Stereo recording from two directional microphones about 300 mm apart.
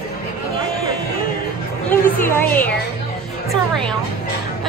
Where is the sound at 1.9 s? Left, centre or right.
Centre.